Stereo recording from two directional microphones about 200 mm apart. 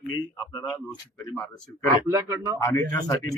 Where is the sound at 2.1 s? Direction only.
15° right (ahead or behind).